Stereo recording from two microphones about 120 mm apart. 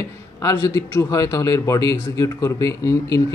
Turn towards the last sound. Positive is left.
turn(degrees=30)  # may be behind; listen again after turning